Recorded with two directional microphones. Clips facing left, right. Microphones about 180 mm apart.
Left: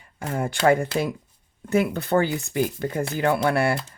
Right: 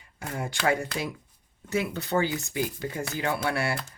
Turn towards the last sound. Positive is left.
turn(degrees=55)  # may be behind; listen again after turning